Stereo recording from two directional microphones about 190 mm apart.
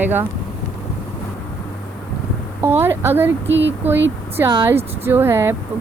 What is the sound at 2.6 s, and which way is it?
Speech, 10° right (ahead or behind).